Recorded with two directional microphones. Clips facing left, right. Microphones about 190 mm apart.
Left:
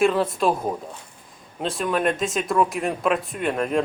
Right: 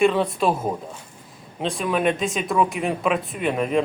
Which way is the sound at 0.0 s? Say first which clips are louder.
Right 1 dB; centre (ahead or behind).